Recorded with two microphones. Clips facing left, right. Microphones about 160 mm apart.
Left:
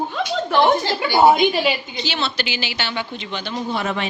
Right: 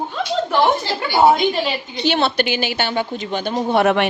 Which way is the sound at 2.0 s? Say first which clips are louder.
Right 7 dB; 55° right (ahead or behind).